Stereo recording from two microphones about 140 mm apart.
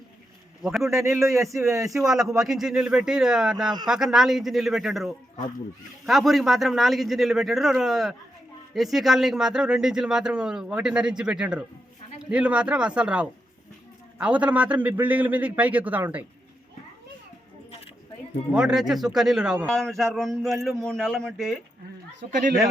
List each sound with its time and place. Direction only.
0.6 s speech: centre (ahead or behind)
0.9 s a man's voice: 20° right (ahead or behind)
2.2 s a man's voice: centre (ahead or behind)
18.5 s speech: 5° right (ahead or behind)
22.3 s speech: 65° right (ahead or behind)